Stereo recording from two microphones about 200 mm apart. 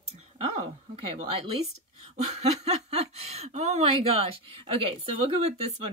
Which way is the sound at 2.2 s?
35° right (ahead or behind).